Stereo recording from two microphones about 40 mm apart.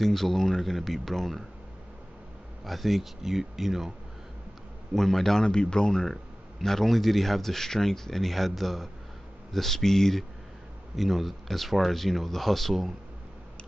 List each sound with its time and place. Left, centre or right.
0.0 s speech: centre
2.6 s speech: centre
4.9 s speech: centre
5.4 s speech: left
6.6 s speech: centre
11.0 s speech: centre